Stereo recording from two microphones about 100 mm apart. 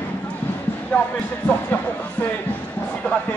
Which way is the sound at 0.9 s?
10° left (ahead or behind).